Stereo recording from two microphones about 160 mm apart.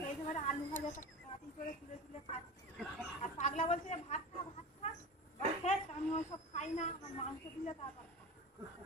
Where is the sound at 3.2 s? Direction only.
45° left (ahead or behind).